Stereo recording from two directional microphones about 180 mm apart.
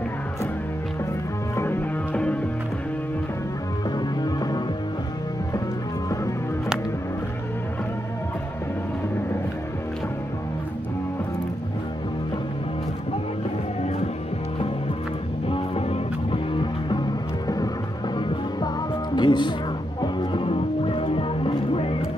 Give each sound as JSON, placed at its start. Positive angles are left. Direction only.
{"t": 1.6, "sound": "music", "side_deg": 10}
{"t": 15.4, "sound": "music", "side_deg": 30}
{"t": 19.1, "sound": "music", "side_deg": 25}